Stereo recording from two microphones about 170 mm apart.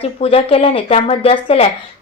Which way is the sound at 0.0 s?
35° left (ahead or behind).